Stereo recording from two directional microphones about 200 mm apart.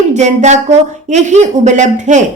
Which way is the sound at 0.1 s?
35° right (ahead or behind).